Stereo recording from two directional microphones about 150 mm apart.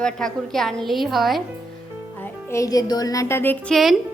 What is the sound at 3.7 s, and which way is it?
Speech, centre (ahead or behind).